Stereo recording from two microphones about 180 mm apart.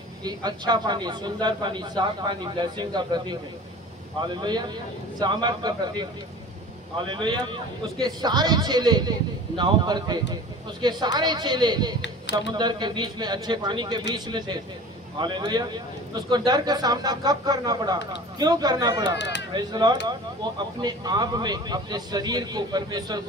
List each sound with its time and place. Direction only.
0.2 s speech: 25° right (ahead or behind)
4.4 s speech: 25° right (ahead or behind)
7.1 s speech: 25° right (ahead or behind)
12.0 s speech: 75° left (ahead or behind)
12.5 s speech: 25° right (ahead or behind)
19.0 s speech: 75° left (ahead or behind)
19.5 s speech: 25° right (ahead or behind)